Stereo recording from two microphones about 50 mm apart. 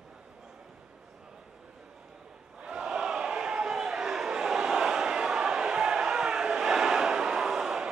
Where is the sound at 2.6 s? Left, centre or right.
Centre.